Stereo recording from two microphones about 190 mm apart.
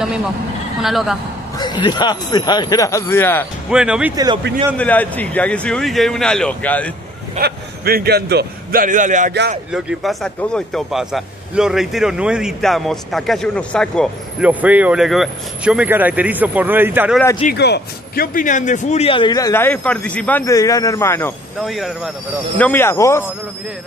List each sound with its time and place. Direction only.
0.8 s speech: centre (ahead or behind)
1.6 s a man's voice: 25° left (ahead or behind)
3.7 s speech: 5° right (ahead or behind)
4.1 s speech: 20° right (ahead or behind)
4.7 s a man's voice: 10° left (ahead or behind)
7.3 s a man's voice: 55° right (ahead or behind)
9.7 s speech: 5° right (ahead or behind)
14.5 s speech: 10° right (ahead or behind)
17.6 s a man's voice: 60° left (ahead or behind); by 21.3 s 15° left (ahead or behind)
21.6 s speech: centre (ahead or behind)
22.6 s a man's voice: 10° left (ahead or behind)